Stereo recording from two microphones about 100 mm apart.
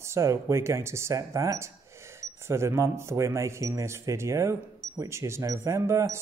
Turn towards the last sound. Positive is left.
turn(degrees=-30)  # may be behind; listen again after turning